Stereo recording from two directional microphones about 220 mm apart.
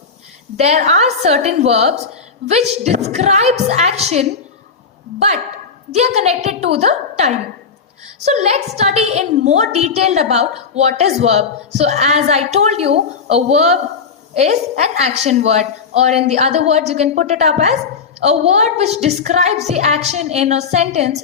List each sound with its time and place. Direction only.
0.5 s a woman's voice: 30° right (ahead or behind)
5.9 s a woman's voice: 30° right (ahead or behind)